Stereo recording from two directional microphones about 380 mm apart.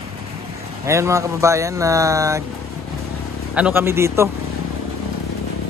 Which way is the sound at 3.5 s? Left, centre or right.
Centre.